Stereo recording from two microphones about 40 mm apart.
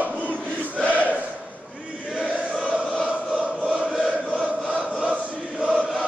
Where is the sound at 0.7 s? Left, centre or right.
Right.